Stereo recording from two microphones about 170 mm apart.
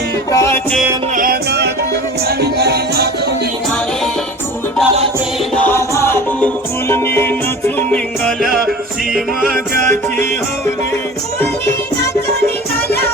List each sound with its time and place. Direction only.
0.3 s music: 15° left (ahead or behind)
1.1 s music: 60° right (ahead or behind)
5.5 s music: 10° left (ahead or behind)